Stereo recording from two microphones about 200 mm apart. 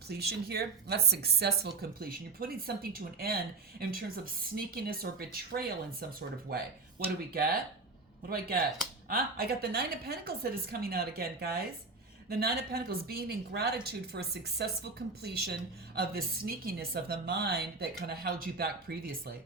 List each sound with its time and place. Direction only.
0.1 s speech: 55° right (ahead or behind)
8.3 s speech: 50° right (ahead or behind)